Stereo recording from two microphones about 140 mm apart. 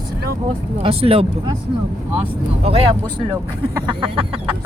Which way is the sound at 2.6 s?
45° right (ahead or behind).